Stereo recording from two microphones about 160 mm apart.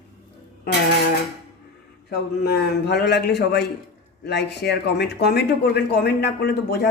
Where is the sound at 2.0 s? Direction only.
85° left.